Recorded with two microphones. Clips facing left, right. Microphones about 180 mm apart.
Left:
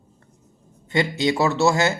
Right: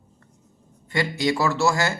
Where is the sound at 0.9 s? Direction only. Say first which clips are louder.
Left 2 dB; 25° left (ahead or behind).